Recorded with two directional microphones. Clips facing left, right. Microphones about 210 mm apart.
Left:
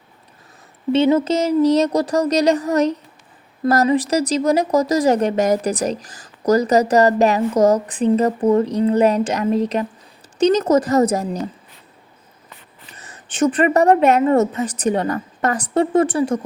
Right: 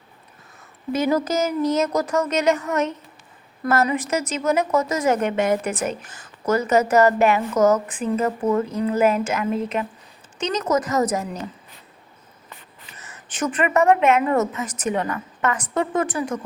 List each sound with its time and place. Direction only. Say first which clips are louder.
0.9 s speech: left 5 dB; 25° left (ahead or behind)
13.0 s speech: left 8 dB; 30° left (ahead or behind)